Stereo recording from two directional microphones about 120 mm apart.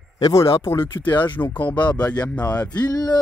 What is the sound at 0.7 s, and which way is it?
Speech, 40° left (ahead or behind).